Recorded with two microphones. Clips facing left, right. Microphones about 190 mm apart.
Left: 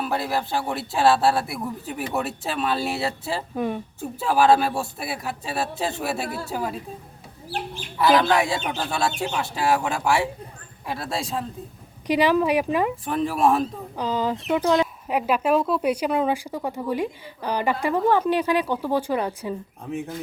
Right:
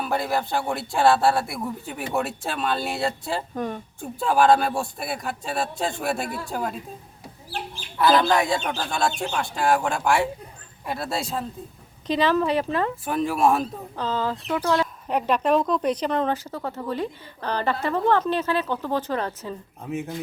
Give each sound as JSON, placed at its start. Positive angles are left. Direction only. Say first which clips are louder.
{"t": 0.0, "sound": "speech", "louder": "even", "side_deg": 0}
{"t": 6.2, "sound": "a woman's voice", "louder": "left 1 dB", "side_deg": 35}
{"t": 6.5, "sound": "speech", "louder": "even", "side_deg": 5}
{"t": 7.9, "sound": "speech", "louder": "even", "side_deg": 0}
{"t": 12.0, "sound": "a woman's voice", "louder": "left 2 dB", "side_deg": 10}
{"t": 13.1, "sound": "speech", "louder": "right 1 dB", "side_deg": 0}
{"t": 13.9, "sound": "a woman's voice", "louder": "left 1 dB", "side_deg": 15}
{"t": 15.0, "sound": "a woman's voice", "louder": "even", "side_deg": 5}
{"t": 19.8, "sound": "speech", "louder": "right 2 dB", "side_deg": 0}